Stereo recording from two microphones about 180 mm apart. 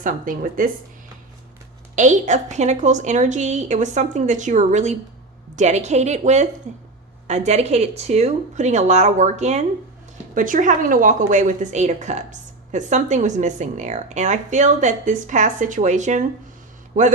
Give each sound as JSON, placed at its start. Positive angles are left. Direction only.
{"t": 0.0, "sound": "speech", "side_deg": -45}
{"t": 2.0, "sound": "a woman's voice", "side_deg": -40}